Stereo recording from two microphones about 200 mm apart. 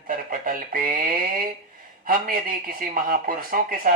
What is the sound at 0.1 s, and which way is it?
Speech, 45° right (ahead or behind).